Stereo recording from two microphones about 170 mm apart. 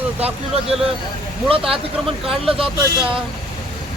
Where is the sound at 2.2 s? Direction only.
30° right (ahead or behind).